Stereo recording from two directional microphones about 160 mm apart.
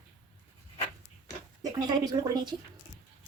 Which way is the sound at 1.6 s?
25° right (ahead or behind).